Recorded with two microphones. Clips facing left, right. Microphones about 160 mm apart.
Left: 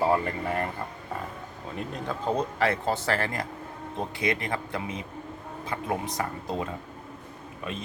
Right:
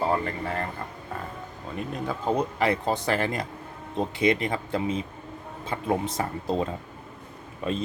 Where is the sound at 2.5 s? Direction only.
15° right (ahead or behind).